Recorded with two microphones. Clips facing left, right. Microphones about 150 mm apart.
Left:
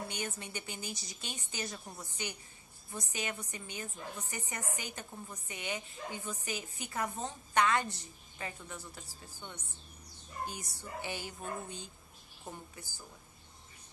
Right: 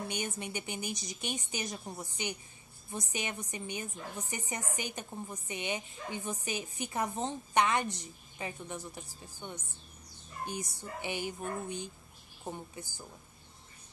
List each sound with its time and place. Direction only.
0.1 s a woman's voice: 20° right (ahead or behind)